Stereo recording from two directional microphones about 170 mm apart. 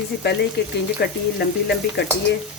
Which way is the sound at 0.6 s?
75° left (ahead or behind).